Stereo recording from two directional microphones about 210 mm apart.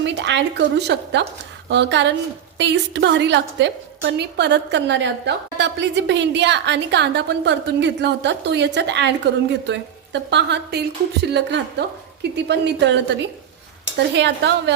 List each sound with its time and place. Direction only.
0.0 s a woman's voice: 55° right (ahead or behind)
14.1 s stir: 55° right (ahead or behind)